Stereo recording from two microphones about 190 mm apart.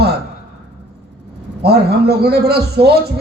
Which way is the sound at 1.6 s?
55° right (ahead or behind).